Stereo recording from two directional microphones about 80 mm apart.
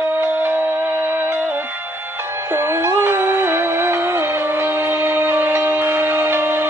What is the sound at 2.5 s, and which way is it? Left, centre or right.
Music, right.